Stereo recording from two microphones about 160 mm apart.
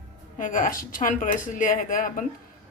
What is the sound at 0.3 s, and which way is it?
Speech, 55° left (ahead or behind).